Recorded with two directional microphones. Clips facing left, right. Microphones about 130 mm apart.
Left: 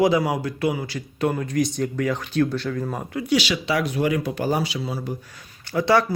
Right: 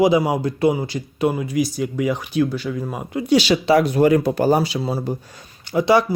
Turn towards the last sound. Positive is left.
turn(degrees=-15)  # may be behind; listen again after turning